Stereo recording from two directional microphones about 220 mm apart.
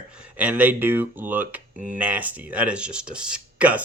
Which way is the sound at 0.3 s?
5° right (ahead or behind).